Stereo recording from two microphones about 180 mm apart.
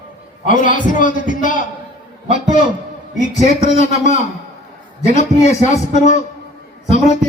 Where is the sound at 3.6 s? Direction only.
40° left (ahead or behind).